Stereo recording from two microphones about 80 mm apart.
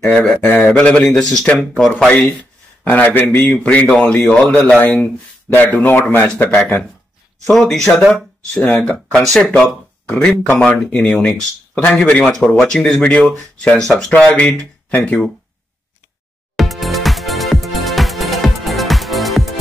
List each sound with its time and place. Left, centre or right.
0.0 s a man's voice: centre
4.0 s a man's voice: centre
8.5 s a man's voice: centre
16.5 s music: centre